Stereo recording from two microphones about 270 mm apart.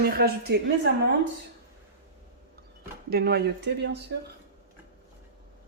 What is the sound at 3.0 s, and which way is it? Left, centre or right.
Speech, right.